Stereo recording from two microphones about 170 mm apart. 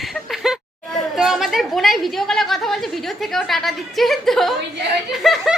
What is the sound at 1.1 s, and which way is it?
A woman's voice, centre (ahead or behind).